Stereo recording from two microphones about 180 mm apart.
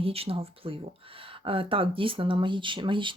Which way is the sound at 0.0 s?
30° right (ahead or behind).